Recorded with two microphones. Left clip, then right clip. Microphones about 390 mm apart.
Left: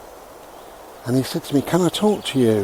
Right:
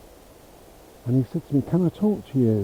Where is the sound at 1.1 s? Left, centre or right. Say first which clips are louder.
Left 5 dB; centre.